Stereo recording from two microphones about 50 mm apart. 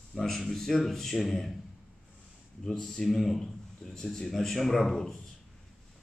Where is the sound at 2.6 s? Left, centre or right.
Centre.